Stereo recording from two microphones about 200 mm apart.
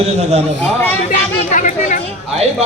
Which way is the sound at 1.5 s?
40° left (ahead or behind).